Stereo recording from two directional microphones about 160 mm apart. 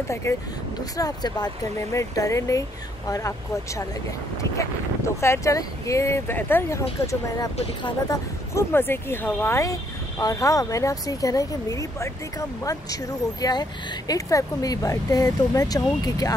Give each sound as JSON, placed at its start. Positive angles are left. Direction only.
{"t": 0.1, "sound": "speech", "side_deg": 20}